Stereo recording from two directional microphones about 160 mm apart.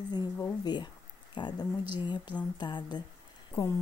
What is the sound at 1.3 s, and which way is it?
Speech, 30° left (ahead or behind).